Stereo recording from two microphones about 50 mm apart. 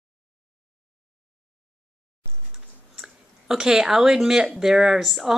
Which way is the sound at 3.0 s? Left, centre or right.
Centre.